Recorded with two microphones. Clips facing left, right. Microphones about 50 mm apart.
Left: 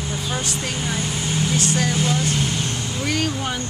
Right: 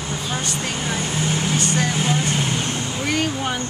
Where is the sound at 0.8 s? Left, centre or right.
Centre.